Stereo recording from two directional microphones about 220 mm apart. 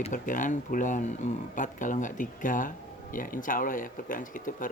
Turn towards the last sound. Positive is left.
turn(degrees=40)  # may be behind; listen again after turning